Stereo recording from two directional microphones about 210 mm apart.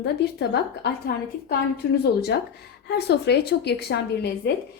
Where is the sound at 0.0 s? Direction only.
55° left (ahead or behind).